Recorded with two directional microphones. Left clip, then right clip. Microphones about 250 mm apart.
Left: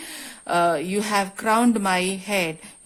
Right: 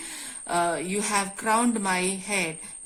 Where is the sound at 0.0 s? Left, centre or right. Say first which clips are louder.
Left 3 dB; left.